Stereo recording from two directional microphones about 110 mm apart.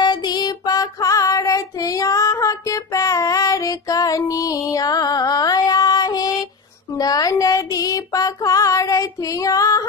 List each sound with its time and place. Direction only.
0.0 s child singing: 40° left (ahead or behind)
7.0 s music: 35° left (ahead or behind)